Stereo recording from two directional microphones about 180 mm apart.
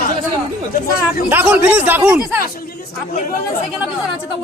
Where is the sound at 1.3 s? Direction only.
10° right (ahead or behind).